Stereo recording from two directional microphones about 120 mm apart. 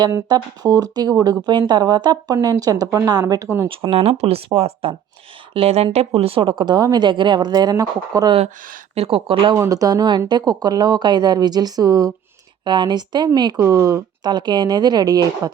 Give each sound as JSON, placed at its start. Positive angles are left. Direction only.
{"t": 0.3, "sound": "speech", "side_deg": -30}
{"t": 3.7, "sound": "speech", "side_deg": -50}
{"t": 9.0, "sound": "speech", "side_deg": -50}
{"t": 9.6, "sound": "speech", "side_deg": -30}
{"t": 13.7, "sound": "speech", "side_deg": -25}